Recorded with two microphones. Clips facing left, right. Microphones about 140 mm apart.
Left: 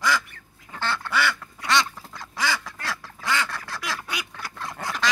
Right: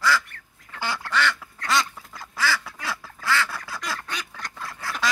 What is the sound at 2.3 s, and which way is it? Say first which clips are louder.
Duck: right 1 dB; 20° left (ahead or behind).